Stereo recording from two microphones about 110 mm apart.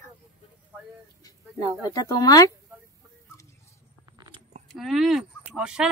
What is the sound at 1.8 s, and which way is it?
Speech, 35° left (ahead or behind).